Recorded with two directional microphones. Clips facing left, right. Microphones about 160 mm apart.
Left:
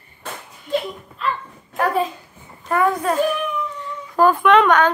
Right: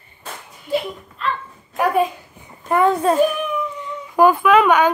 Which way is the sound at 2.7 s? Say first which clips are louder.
Right 3 dB; 25° right (ahead or behind).